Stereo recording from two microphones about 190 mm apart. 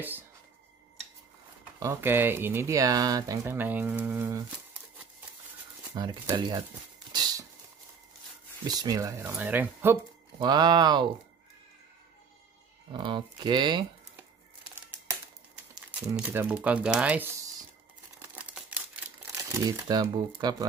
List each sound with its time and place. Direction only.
1.8 s speech: 15° right (ahead or behind)
5.9 s speech: 20° right (ahead or behind)
7.1 s a sound: 20° right (ahead or behind)
8.6 s speech: 20° right (ahead or behind)
10.4 s speech: 20° right (ahead or behind)
12.9 s speech: 25° right (ahead or behind)
14.1 s crumpling: 10° right (ahead or behind)
16.2 s speech: 10° right (ahead or behind)
18.3 s crumpling: 10° right (ahead or behind)
19.3 s speech: 15° right (ahead or behind)